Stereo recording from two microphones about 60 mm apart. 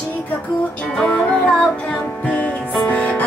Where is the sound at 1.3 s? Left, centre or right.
Centre.